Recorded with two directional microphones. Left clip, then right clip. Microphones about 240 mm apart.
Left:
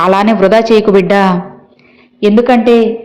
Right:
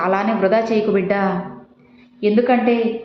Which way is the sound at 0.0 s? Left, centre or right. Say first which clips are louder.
Left 9 dB; left.